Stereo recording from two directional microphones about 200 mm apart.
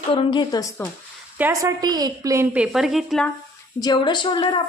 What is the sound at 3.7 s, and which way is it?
Speech, 20° left (ahead or behind).